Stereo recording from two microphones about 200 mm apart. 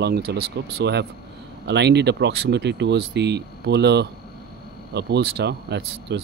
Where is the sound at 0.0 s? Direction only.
55° right (ahead or behind).